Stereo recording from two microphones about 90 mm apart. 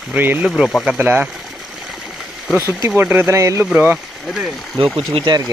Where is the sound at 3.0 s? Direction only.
25° right (ahead or behind).